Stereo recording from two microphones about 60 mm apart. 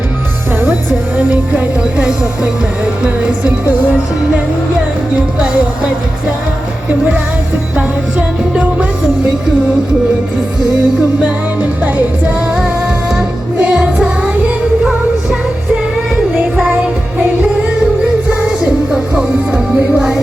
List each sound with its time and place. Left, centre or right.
1.1 s speech: right
5.4 s speech: centre
11.2 s music: right
12.5 s music: centre
18.4 s music: centre